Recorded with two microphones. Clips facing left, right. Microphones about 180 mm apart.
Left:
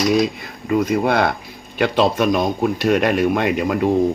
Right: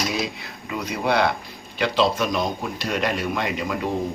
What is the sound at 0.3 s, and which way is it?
Speech, 50° left (ahead or behind).